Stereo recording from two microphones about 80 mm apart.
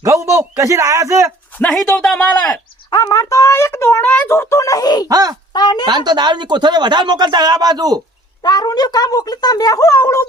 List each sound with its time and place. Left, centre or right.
0.0 s a man's voice: right
1.6 s speech: centre
2.9 s speech: left
5.0 s speech: right
5.5 s speech: left
6.1 s speech: right
8.4 s speech: left